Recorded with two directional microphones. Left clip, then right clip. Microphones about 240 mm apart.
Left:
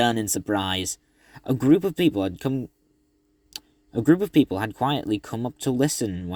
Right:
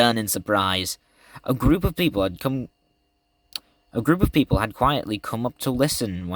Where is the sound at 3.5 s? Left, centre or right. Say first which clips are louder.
Right 1 dB; centre.